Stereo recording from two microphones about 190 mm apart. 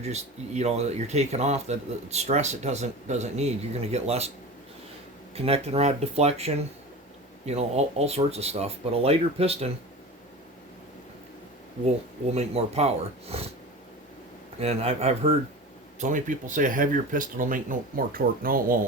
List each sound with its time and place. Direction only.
0.0 s speech: 35° right (ahead or behind)
5.3 s speech: 30° right (ahead or behind)
11.9 s speech: 35° right (ahead or behind)
13.3 s cat: 30° right (ahead or behind)
14.6 s speech: 35° right (ahead or behind); by 18.8 s 50° right (ahead or behind)